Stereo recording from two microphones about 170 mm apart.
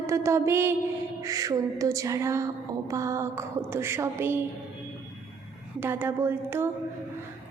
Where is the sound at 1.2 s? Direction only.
20° right (ahead or behind).